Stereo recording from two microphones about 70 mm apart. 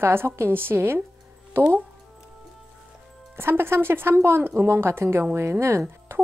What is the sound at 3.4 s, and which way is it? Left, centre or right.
Speech, right.